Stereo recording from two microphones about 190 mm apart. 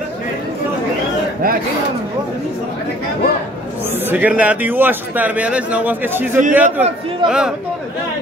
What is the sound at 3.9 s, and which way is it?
A man's voice, 10° right (ahead or behind).